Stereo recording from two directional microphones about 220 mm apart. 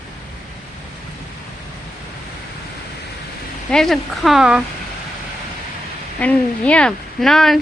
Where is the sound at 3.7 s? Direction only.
Centre (ahead or behind).